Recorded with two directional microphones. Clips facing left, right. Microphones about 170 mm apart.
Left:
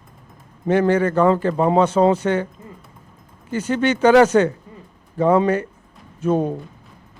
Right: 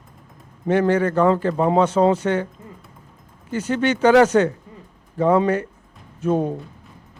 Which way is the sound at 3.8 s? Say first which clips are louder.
Left 1 dB; 10° left (ahead or behind).